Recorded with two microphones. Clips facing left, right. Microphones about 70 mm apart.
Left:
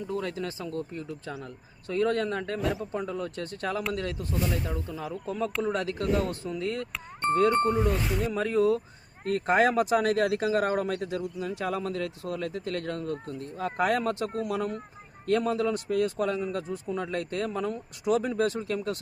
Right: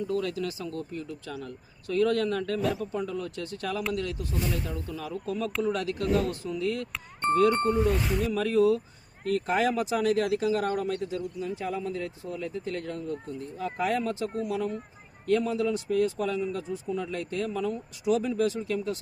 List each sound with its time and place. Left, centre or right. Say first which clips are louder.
0.1 s speech: right 2 dB; left
6.9 s speech: even; centre
8.3 s speech: right 1 dB; left